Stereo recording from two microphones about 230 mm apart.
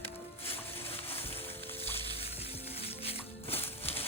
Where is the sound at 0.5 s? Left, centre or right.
Centre.